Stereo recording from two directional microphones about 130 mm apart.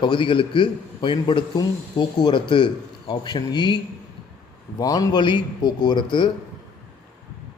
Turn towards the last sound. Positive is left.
turn(degrees=35)  # may be behind; listen again after turning